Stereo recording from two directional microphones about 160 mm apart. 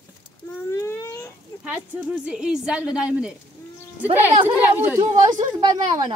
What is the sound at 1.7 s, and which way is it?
A woman's voice, 5° right (ahead or behind).